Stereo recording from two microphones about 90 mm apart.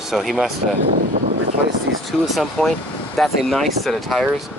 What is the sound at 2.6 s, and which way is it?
Speech, 5° left (ahead or behind).